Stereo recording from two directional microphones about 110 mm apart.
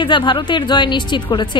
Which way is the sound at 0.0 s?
45° left (ahead or behind).